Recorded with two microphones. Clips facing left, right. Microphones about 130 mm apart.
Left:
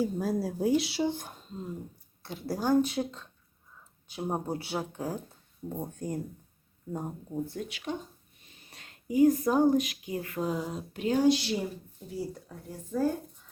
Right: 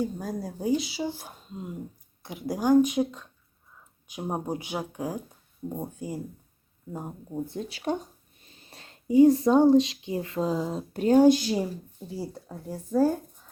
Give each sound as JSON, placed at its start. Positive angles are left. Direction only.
{"t": 0.0, "sound": "speech", "side_deg": 5}
{"t": 7.4, "sound": "speech", "side_deg": -20}
{"t": 7.7, "sound": "speech", "side_deg": -40}
{"t": 12.0, "sound": "speech", "side_deg": -30}